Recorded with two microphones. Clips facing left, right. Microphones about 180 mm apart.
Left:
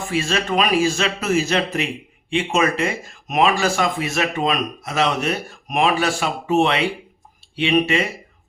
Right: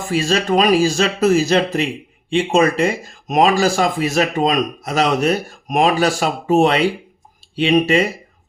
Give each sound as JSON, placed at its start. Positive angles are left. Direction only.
{"t": 0.1, "sound": "speech", "side_deg": -35}